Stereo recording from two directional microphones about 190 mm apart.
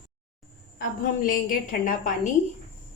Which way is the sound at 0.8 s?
45° left (ahead or behind).